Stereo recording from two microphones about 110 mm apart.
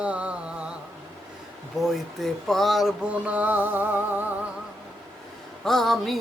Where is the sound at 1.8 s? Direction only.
Centre (ahead or behind).